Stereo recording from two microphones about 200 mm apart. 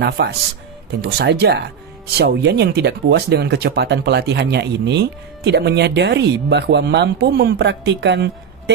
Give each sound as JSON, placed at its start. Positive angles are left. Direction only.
{"t": 0.0, "sound": "speech", "side_deg": -55}